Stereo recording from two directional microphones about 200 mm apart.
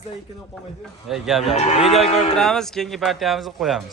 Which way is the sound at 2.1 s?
35° left (ahead or behind).